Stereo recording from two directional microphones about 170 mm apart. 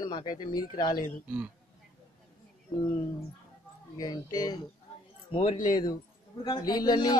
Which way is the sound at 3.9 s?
20° left (ahead or behind).